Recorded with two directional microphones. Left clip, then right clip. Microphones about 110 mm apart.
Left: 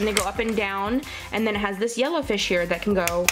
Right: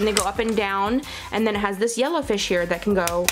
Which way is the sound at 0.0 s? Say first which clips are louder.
Right 2 dB; 15° right (ahead or behind).